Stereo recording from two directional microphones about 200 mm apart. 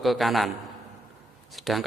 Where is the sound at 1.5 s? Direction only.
Centre (ahead or behind).